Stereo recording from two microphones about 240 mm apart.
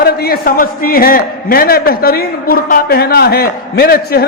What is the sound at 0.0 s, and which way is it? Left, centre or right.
A man's voice, left.